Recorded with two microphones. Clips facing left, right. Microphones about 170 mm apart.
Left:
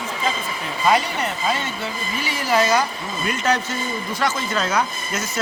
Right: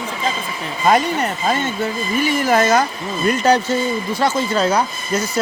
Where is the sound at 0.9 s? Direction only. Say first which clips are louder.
Right 4 dB; 45° right (ahead or behind).